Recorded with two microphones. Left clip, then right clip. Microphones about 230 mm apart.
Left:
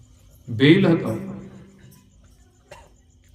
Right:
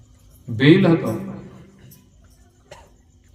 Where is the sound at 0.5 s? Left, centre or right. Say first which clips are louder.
Right 1 dB; centre.